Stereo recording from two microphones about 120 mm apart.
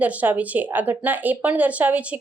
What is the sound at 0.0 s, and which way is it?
Speech, 15° right (ahead or behind).